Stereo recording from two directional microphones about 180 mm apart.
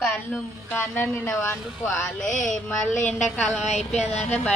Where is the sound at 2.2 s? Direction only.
40° left (ahead or behind).